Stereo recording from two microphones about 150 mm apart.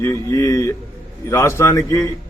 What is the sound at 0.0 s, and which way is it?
A man's voice, 20° left (ahead or behind).